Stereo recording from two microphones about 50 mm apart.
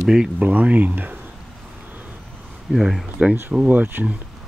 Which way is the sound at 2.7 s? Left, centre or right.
Centre.